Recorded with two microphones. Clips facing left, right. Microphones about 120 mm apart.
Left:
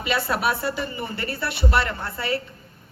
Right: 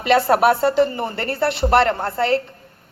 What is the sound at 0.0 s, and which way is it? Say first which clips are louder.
A woman's voice: right 9 dB; 60° right (ahead or behind).